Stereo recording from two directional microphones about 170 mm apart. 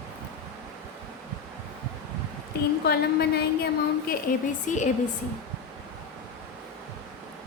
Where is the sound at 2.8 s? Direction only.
70° left (ahead or behind).